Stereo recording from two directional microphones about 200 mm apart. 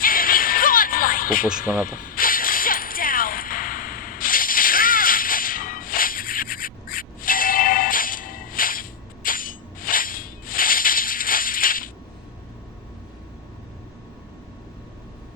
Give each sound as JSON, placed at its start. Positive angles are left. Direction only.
{"t": 0.0, "sound": "music", "side_deg": 45}
{"t": 1.8, "sound": "coin", "side_deg": 45}